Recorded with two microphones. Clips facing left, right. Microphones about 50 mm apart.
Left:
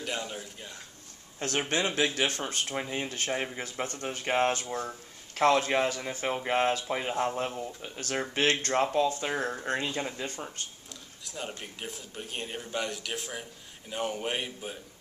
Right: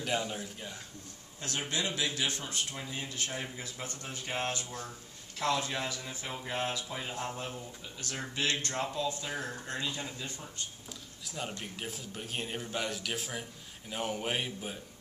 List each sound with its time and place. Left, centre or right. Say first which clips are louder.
0.0 s a man's voice: right 1 dB; centre
1.4 s speech: left 6 dB; left
11.2 s a man's voice: left 1 dB; centre